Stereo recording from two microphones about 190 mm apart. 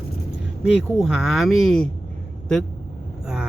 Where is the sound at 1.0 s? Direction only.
Centre (ahead or behind).